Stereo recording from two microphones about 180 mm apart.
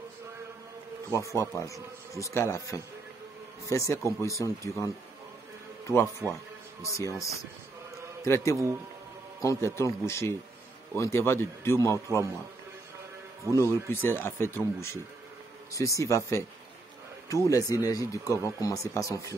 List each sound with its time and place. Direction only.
1.3 s speech: 15° left (ahead or behind)
6.8 s a man's voice: 15° left (ahead or behind)
13.5 s speech: 15° left (ahead or behind)